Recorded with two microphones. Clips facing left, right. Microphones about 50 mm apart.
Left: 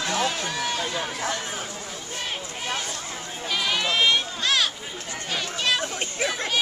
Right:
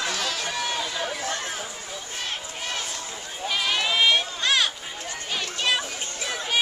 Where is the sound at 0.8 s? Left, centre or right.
Centre.